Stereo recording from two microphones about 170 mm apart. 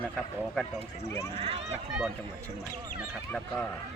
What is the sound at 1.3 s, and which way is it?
Speech, 35° right (ahead or behind).